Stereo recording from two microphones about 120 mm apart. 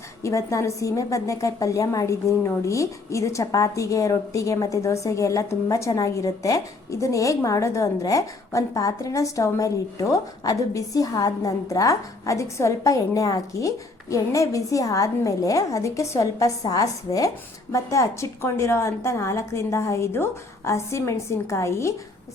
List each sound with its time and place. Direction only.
0.2 s a woman's voice: 25° left (ahead or behind)